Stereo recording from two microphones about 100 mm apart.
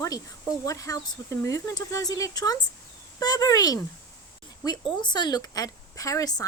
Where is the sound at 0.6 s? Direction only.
35° left (ahead or behind).